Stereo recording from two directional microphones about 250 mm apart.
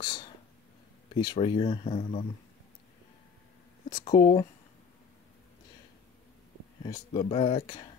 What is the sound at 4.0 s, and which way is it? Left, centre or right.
Speech, left.